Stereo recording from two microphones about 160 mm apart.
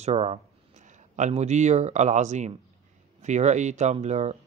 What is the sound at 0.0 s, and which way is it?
Speech, 40° right (ahead or behind).